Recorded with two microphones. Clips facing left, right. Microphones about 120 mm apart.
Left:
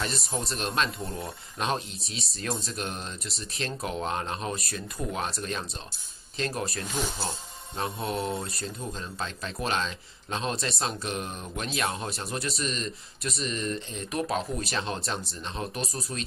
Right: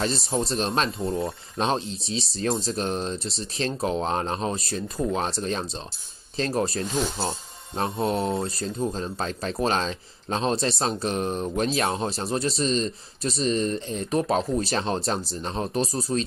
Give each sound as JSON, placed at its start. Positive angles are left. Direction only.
{"t": 0.0, "sound": "speech", "side_deg": -30}